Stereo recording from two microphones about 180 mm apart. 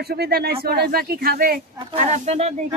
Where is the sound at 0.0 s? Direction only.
60° right (ahead or behind).